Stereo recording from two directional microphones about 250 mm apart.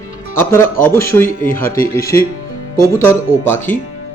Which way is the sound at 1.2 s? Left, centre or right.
Left.